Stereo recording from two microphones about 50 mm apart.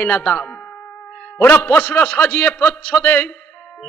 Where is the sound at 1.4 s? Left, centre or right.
Left.